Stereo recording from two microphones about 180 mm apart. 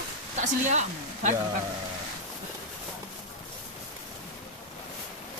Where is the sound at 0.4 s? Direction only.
40° right (ahead or behind).